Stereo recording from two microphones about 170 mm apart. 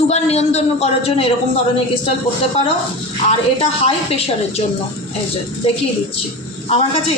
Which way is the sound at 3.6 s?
35° left (ahead or behind).